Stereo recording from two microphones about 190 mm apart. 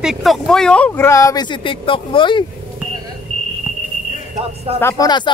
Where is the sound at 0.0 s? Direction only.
Centre (ahead or behind); by 2.4 s 25° left (ahead or behind).